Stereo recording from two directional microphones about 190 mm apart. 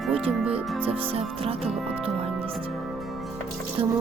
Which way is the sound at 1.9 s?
30° right (ahead or behind).